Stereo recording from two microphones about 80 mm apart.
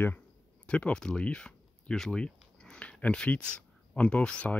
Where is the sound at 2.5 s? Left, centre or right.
Centre.